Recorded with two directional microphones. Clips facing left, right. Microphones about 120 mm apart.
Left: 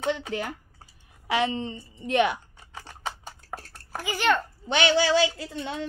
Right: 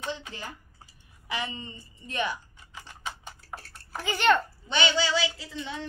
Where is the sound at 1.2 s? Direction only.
90° left; by 2.8 s 70° left (ahead or behind).